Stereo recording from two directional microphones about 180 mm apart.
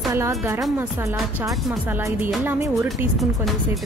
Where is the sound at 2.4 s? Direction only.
10° right (ahead or behind).